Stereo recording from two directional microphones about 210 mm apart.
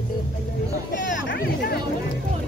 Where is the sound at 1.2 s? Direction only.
45° left (ahead or behind).